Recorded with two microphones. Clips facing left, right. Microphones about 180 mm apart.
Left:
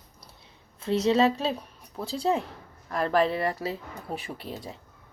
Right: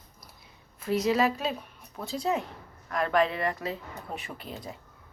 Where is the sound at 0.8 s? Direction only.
25° left (ahead or behind).